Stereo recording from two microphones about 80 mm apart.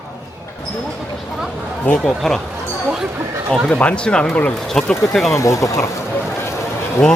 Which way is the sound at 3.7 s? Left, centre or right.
Centre.